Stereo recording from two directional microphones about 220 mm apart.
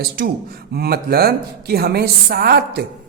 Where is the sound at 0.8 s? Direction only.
45° right (ahead or behind).